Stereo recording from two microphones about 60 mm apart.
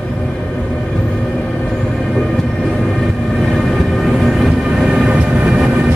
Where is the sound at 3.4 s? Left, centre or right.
Centre.